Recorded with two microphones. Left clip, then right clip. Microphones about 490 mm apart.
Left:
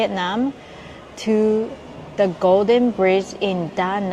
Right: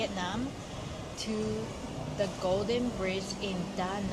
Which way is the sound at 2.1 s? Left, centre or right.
Left.